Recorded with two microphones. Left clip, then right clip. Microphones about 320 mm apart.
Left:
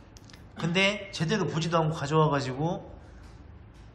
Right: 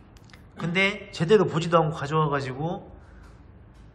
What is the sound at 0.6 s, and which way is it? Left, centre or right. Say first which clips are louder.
A man's voice: right 2 dB; centre.